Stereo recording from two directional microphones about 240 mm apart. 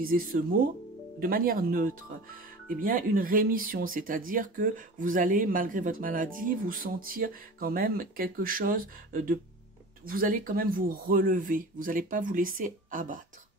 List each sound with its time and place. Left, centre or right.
0.0 s speech: right